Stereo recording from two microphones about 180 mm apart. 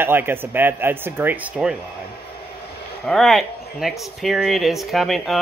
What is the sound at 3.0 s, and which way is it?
Speech, centre (ahead or behind).